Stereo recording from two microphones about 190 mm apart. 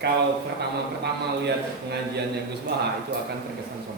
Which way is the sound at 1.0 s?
60° right (ahead or behind).